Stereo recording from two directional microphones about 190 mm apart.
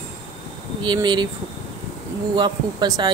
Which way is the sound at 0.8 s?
25° right (ahead or behind).